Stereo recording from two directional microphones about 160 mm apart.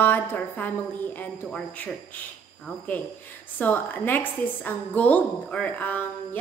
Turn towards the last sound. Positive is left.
turn(degrees=10)  # may be behind; listen again after turning